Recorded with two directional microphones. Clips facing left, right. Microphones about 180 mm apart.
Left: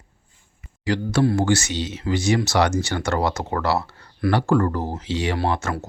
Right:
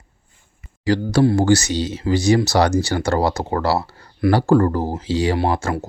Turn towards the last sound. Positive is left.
turn(degrees=-30)  # may be behind; listen again after turning